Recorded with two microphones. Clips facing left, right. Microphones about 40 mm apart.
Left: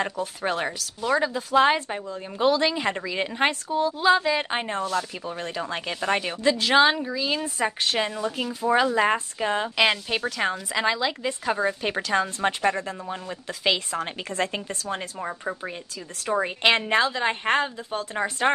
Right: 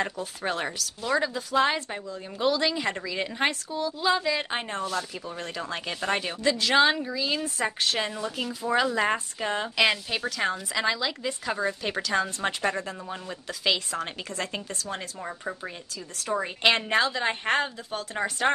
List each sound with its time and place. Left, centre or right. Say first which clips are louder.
0.0 s a woman's voice: left 3 dB; centre